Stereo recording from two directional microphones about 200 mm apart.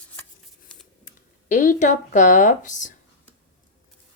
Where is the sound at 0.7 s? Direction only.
5° left (ahead or behind).